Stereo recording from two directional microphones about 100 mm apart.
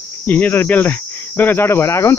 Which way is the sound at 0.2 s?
15° left (ahead or behind).